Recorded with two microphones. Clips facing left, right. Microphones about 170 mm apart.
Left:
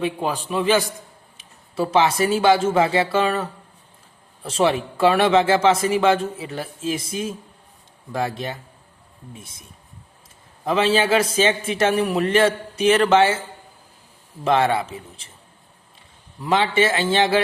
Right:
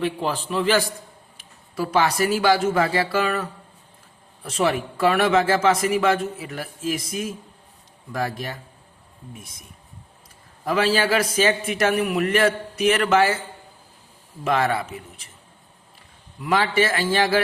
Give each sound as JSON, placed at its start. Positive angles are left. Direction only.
{"t": 0.0, "sound": "speech", "side_deg": 20}
{"t": 10.7, "sound": "speech", "side_deg": 25}
{"t": 14.4, "sound": "speech", "side_deg": 25}
{"t": 16.4, "sound": "speech", "side_deg": 25}